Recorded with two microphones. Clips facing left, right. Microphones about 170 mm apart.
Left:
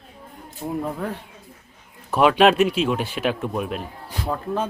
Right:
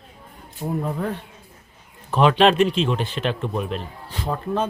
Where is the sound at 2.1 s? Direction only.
10° left (ahead or behind).